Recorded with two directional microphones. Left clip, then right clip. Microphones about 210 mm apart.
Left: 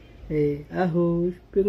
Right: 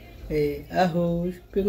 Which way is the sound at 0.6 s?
30° left (ahead or behind).